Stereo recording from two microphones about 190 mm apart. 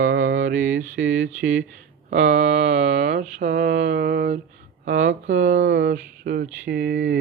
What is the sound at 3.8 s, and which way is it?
Mantra, 55° right (ahead or behind).